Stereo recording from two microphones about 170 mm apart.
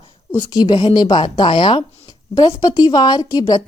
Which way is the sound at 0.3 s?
25° left (ahead or behind).